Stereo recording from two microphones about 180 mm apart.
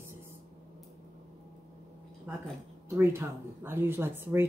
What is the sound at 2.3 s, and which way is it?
Speech, 10° right (ahead or behind).